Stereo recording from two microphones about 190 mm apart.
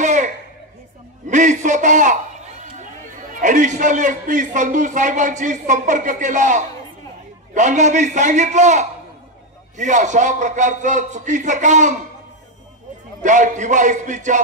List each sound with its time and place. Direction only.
0.0 s a sound: 40° right (ahead or behind)
1.2 s a man's voice: 40° right (ahead or behind)
13.2 s a man's voice: 40° right (ahead or behind)